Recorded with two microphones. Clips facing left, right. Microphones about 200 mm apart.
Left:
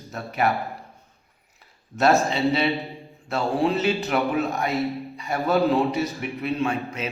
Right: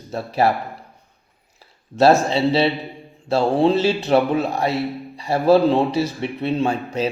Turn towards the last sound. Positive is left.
turn(degrees=-30)  # may be behind; listen again after turning